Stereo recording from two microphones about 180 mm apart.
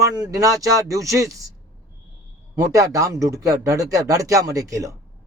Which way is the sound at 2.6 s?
15° right (ahead or behind).